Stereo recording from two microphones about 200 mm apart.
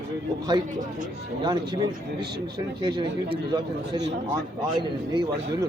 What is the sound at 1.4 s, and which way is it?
Speech, 20° right (ahead or behind).